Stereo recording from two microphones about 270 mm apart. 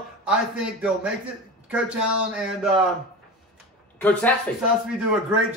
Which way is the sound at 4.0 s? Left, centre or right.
Centre.